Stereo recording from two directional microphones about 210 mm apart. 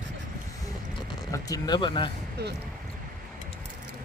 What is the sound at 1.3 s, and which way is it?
Speech, 15° left (ahead or behind).